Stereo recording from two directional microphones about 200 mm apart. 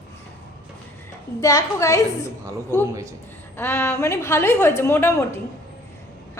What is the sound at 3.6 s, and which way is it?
A woman's voice, 15° left (ahead or behind).